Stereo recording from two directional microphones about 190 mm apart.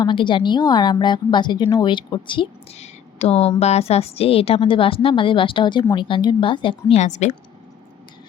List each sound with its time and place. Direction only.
0.0 s speech: 25° left (ahead or behind)